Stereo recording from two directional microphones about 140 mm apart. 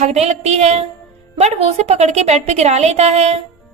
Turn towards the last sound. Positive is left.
turn(degrees=-50)  # may be behind; listen again after turning